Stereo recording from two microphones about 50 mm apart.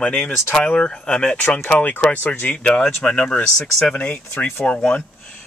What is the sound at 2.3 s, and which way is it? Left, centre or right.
Speech, left.